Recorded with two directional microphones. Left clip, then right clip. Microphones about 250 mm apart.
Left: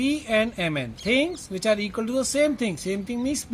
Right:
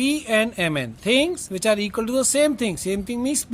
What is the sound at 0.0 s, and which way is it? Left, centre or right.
Speech, right.